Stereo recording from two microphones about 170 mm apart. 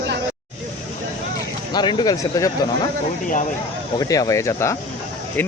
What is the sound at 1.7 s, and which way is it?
Speech, 25° left (ahead or behind).